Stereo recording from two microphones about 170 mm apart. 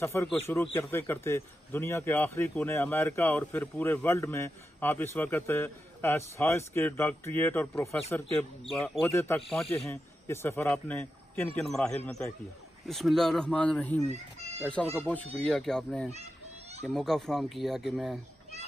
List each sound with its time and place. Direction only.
0.0 s a man's voice: 15° left (ahead or behind)
14.0 s children playing: 40° right (ahead or behind)
15.0 s speech: 5° left (ahead or behind)